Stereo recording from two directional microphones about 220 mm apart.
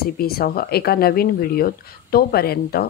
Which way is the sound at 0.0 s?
45° left (ahead or behind).